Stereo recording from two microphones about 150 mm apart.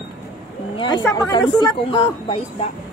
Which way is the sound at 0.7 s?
30° left (ahead or behind).